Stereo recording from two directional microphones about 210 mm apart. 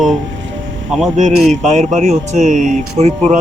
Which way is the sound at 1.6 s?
35° right (ahead or behind).